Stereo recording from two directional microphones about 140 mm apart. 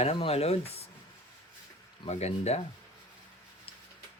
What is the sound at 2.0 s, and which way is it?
Speech, 50° left (ahead or behind).